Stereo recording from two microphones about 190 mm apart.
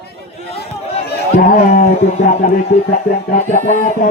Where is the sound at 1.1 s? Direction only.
55° left (ahead or behind).